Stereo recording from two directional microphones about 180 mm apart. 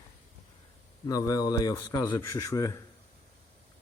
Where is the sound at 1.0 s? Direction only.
20° left (ahead or behind).